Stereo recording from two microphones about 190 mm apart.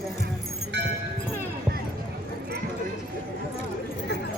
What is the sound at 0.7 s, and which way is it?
Music, 65° right (ahead or behind).